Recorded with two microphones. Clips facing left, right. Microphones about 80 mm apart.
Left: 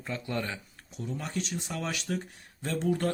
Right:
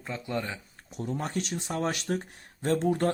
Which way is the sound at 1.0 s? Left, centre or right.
Right.